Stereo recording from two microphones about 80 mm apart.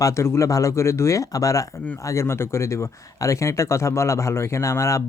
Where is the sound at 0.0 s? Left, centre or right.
Left.